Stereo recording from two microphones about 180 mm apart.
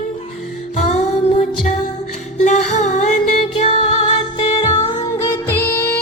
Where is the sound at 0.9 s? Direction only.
40° left (ahead or behind).